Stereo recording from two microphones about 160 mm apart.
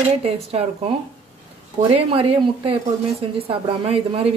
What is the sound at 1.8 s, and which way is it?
Speech, 35° right (ahead or behind).